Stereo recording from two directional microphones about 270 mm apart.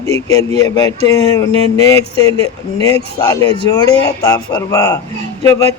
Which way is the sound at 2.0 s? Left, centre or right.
Right.